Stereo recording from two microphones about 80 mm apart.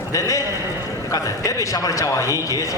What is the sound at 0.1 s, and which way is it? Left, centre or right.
A man's voice, left.